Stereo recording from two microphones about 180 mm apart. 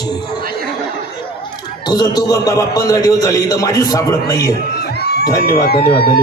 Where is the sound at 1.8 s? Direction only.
20° left (ahead or behind).